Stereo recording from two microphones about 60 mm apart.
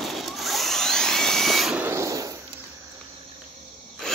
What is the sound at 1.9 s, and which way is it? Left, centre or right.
Drawer open or close, right.